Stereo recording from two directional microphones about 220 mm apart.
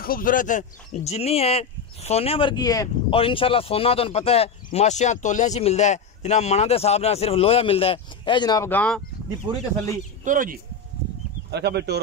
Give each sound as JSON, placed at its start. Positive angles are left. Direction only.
{"t": 0.0, "sound": "speech", "side_deg": 40}
{"t": 10.2, "sound": "speech", "side_deg": -35}
{"t": 11.5, "sound": "speech", "side_deg": -50}